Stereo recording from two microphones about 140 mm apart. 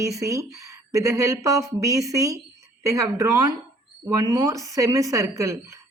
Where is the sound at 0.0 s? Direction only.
25° right (ahead or behind).